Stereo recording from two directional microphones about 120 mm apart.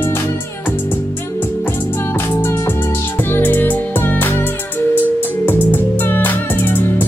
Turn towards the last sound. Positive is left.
turn(degrees=15)  # may be behind; listen again after turning